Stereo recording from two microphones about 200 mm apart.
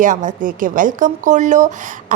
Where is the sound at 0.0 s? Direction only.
40° right (ahead or behind).